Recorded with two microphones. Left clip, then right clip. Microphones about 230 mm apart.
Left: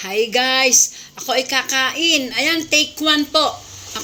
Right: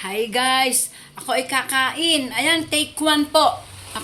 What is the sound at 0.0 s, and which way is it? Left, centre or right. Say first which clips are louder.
A woman's voice: left 3 dB; centre.